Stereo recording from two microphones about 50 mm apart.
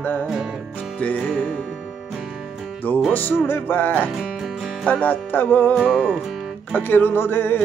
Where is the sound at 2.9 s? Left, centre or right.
Left.